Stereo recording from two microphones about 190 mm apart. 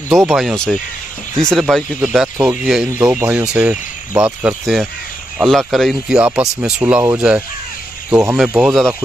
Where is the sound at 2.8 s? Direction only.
15° right (ahead or behind).